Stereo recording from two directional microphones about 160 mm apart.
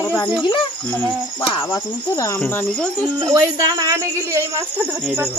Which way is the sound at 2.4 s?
10° left (ahead or behind).